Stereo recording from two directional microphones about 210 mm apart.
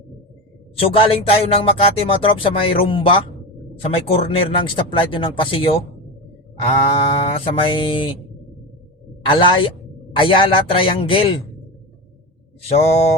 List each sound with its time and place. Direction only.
0.9 s speech: 25° left (ahead or behind)
9.2 s speech: 25° left (ahead or behind)
12.6 s speech: 30° left (ahead or behind)